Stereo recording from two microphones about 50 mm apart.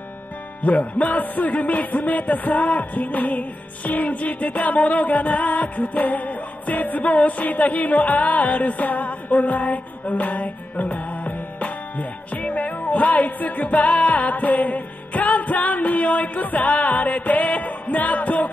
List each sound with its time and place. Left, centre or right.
0.7 s music: left